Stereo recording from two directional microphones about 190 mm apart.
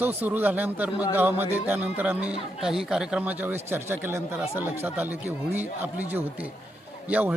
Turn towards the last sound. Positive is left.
turn(degrees=-5)  # may be behind; listen again after turning